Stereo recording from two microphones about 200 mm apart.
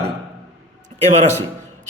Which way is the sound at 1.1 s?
35° right (ahead or behind).